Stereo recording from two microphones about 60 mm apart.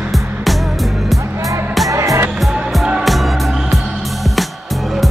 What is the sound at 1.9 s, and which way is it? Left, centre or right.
Music, right.